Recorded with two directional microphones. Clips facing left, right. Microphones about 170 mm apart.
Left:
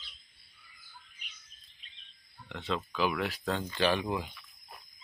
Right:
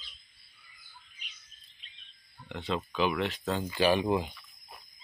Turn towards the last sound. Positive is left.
turn(degrees=-10)  # may be behind; listen again after turning